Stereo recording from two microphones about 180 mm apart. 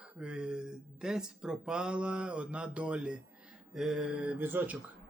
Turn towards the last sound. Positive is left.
turn(degrees=-10)  # may be behind; listen again after turning